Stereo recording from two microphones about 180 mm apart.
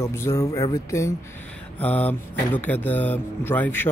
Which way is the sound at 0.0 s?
15° left (ahead or behind).